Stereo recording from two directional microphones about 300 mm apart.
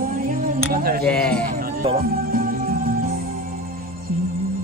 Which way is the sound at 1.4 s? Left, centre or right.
Right.